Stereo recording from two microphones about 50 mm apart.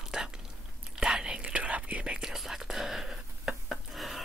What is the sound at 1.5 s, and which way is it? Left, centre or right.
Whispering, right.